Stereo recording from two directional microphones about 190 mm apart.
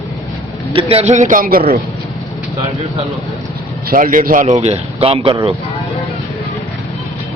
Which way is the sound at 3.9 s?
45° right (ahead or behind).